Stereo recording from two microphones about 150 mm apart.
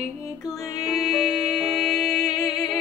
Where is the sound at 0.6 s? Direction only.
25° left (ahead or behind).